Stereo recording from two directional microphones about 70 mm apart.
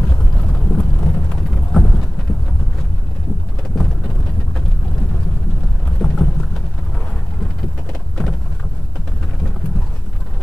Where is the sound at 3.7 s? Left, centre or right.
Centre.